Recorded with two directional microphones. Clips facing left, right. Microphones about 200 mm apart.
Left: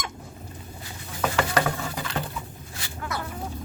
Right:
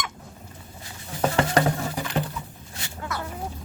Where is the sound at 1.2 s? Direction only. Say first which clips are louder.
Right 3 dB; 30° right (ahead or behind).